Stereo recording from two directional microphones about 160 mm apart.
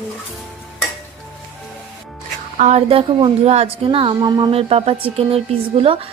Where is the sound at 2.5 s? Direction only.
45° right (ahead or behind).